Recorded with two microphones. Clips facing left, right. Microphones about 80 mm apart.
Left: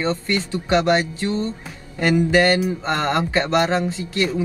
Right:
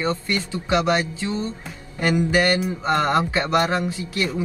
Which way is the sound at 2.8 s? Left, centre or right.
Centre.